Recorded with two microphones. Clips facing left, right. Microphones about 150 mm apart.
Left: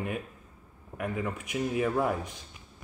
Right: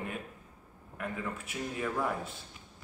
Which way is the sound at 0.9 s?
15° left (ahead or behind).